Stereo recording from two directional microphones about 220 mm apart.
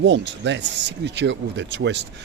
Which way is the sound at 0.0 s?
55° right (ahead or behind).